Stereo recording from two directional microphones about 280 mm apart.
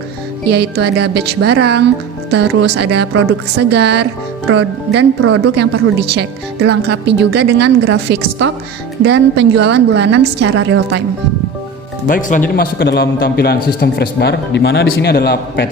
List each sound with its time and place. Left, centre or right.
0.4 s speech: right
12.0 s a man's voice: left